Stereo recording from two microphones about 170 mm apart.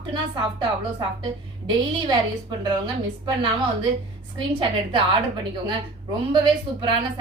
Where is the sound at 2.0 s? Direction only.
25° right (ahead or behind).